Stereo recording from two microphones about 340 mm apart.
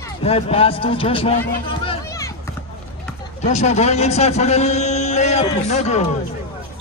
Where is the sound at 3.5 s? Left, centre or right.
Centre.